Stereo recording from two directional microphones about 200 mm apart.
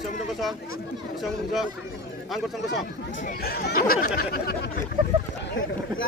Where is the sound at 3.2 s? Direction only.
50° left (ahead or behind).